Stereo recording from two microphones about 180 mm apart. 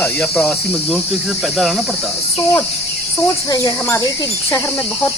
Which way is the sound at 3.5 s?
20° left (ahead or behind).